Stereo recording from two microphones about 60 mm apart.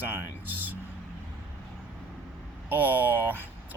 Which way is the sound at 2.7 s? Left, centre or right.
Right.